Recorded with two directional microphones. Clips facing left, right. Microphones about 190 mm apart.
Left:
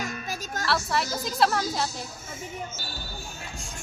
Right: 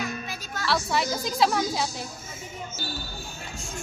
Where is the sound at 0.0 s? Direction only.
45° left (ahead or behind).